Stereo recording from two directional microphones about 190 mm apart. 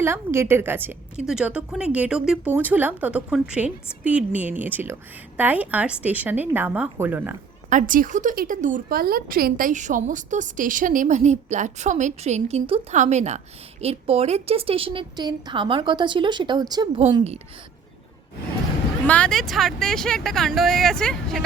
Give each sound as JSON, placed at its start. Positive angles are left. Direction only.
{"t": 0.0, "sound": "a woman's voice", "side_deg": -15}
{"t": 7.7, "sound": "a woman's voice", "side_deg": -45}
{"t": 19.0, "sound": "speech", "side_deg": 5}